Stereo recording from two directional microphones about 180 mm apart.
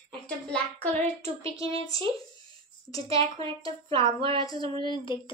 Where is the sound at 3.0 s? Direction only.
30° right (ahead or behind).